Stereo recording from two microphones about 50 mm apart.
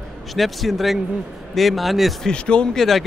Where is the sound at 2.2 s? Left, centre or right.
Centre.